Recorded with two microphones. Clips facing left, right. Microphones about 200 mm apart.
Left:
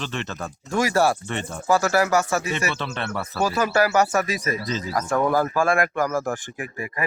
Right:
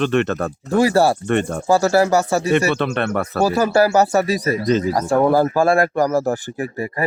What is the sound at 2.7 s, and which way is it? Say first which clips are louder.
Speech: right 9 dB; 60° right (ahead or behind).